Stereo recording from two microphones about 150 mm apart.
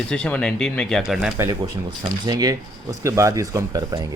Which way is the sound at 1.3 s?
15° right (ahead or behind).